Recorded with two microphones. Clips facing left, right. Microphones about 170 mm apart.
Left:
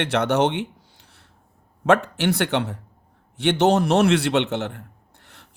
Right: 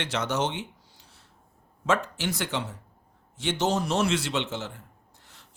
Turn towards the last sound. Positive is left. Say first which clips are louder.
# left 4 dB
turn(degrees=60)  # may be behind; listen again after turning